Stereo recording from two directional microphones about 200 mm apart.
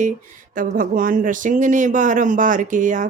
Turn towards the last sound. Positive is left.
turn(degrees=-40)  # may be behind; listen again after turning